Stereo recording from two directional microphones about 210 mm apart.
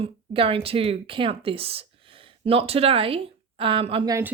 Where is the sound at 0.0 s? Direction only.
25° right (ahead or behind).